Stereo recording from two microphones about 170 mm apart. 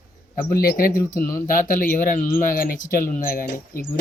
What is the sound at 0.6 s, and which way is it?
Speech, 60° left (ahead or behind).